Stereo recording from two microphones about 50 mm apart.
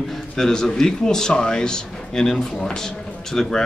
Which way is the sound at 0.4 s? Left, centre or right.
Centre.